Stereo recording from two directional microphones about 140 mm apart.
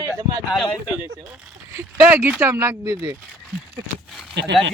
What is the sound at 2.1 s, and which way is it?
Speech, 15° right (ahead or behind).